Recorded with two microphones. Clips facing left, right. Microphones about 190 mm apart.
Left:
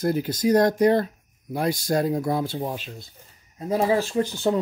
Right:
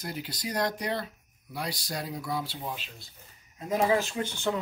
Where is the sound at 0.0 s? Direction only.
50° left (ahead or behind).